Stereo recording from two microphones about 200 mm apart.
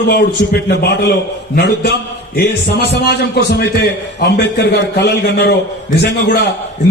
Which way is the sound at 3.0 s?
55° left (ahead or behind).